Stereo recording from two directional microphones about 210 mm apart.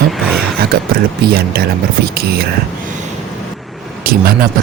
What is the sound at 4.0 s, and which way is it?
Speech, 45° right (ahead or behind).